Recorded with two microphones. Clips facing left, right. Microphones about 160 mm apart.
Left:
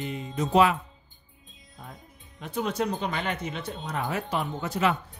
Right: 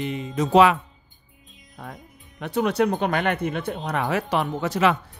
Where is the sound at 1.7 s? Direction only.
75° right (ahead or behind); by 5.0 s 90° right.